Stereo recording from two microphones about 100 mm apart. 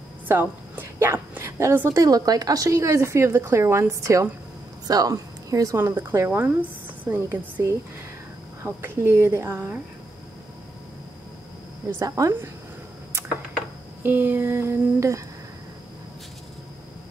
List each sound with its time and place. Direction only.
0.3 s a woman's voice: 20° right (ahead or behind)
8.6 s a woman's voice: 25° right (ahead or behind)
12.0 s a woman's voice: 30° right (ahead or behind)
14.0 s a woman's voice: 20° right (ahead or behind)